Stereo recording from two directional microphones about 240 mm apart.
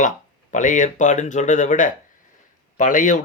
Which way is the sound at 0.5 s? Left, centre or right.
Left.